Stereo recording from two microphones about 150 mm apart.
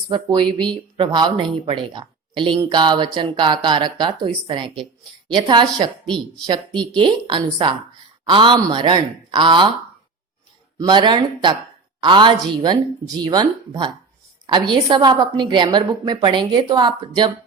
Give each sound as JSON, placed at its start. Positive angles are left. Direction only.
{"t": 0.1, "sound": "a woman's voice", "side_deg": -30}
{"t": 10.8, "sound": "a woman's voice", "side_deg": -30}